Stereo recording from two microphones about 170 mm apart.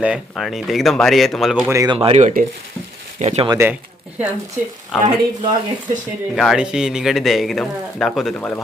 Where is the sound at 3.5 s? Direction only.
15° right (ahead or behind).